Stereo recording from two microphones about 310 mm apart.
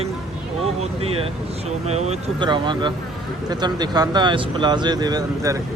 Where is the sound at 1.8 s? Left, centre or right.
Right.